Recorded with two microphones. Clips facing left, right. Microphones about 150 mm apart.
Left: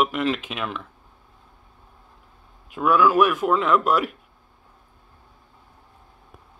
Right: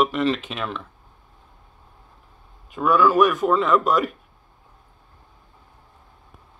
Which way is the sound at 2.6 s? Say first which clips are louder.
Even; 5° left (ahead or behind).